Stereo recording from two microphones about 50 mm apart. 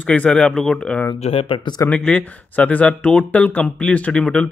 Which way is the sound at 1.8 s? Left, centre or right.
Left.